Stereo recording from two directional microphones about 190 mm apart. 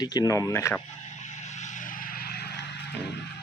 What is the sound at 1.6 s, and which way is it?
Vehicle, 45° left (ahead or behind).